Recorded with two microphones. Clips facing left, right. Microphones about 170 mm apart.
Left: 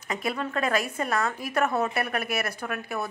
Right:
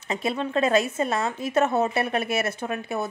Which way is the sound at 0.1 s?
25° right (ahead or behind).